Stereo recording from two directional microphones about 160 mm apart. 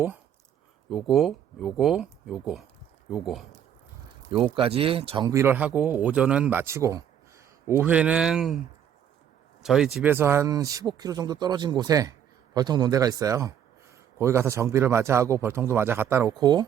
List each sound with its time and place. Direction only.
0.9 s speech: centre (ahead or behind)
4.3 s speech: 30° right (ahead or behind)
5.4 s a man's voice: 10° right (ahead or behind)
9.6 s a man's voice: 5° right (ahead or behind)
16.3 s speech: 25° right (ahead or behind)